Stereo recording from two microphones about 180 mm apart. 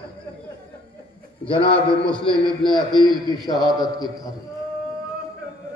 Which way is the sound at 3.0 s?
25° left (ahead or behind).